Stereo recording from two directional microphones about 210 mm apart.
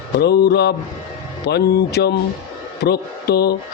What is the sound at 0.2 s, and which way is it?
Speech, 50° left (ahead or behind).